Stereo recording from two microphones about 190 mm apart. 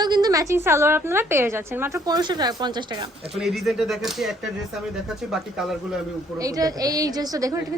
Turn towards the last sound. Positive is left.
turn(degrees=-20)  # may be behind; listen again after turning